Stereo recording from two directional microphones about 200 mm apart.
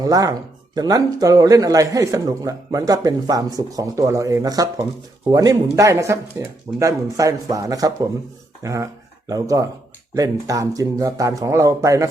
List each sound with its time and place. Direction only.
0.0 s speech: 15° right (ahead or behind)